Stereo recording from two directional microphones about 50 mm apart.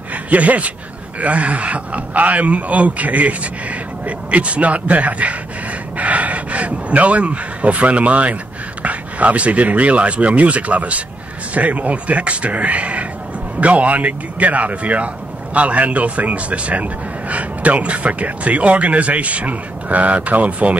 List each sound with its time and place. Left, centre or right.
0.1 s speech: right